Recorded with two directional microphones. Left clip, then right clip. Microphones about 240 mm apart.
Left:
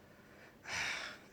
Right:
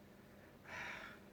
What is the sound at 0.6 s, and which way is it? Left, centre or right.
Gasp, left.